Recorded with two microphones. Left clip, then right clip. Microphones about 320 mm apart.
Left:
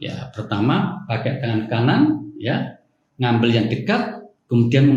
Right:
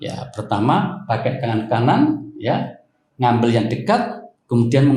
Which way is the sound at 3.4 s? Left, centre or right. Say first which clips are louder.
Right 2 dB; centre.